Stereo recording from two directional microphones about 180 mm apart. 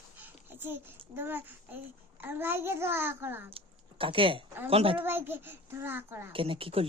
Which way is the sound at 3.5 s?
30° right (ahead or behind).